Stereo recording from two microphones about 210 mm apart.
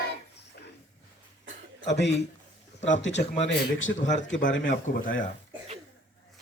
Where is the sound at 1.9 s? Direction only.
55° left (ahead or behind).